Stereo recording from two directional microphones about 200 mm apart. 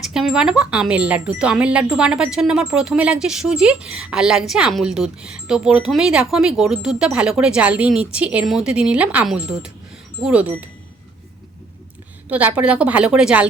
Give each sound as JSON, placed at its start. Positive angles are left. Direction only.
{"t": 0.0, "sound": "speech", "side_deg": 0}
{"t": 12.3, "sound": "a woman's voice", "side_deg": -5}